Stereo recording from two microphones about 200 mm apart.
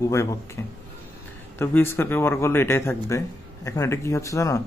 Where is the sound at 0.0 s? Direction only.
15° left (ahead or behind).